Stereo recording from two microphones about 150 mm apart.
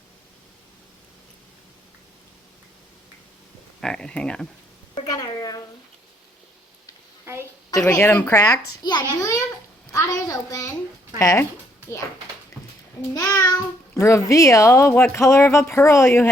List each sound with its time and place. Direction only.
3.8 s speech: 5° left (ahead or behind)
5.0 s a sound: 25° left (ahead or behind)
7.9 s a child's voice: 15° left (ahead or behind)
9.2 s a sound: 20° left (ahead or behind)
9.9 s a child's voice: 20° left (ahead or behind)
13.1 s a child's voice: 25° left (ahead or behind)